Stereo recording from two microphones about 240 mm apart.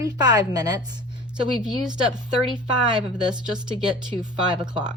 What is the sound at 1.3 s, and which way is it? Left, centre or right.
Speech, centre.